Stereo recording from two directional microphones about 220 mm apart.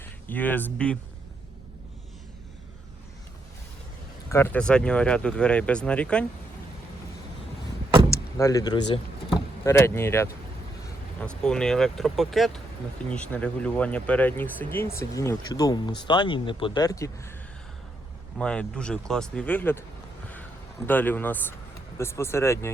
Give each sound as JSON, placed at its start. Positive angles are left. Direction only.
{"t": 0.0, "sound": "speech", "side_deg": 10}
{"t": 4.3, "sound": "speech", "side_deg": 10}
{"t": 8.1, "sound": "vehicle", "side_deg": 15}
{"t": 9.6, "sound": "speech", "side_deg": 10}
{"t": 18.3, "sound": "speech", "side_deg": 5}
{"t": 20.8, "sound": "speech", "side_deg": 10}